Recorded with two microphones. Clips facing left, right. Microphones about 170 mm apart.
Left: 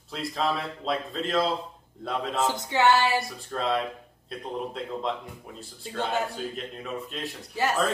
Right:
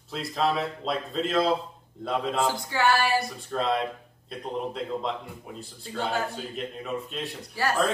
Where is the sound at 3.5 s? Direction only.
Centre (ahead or behind).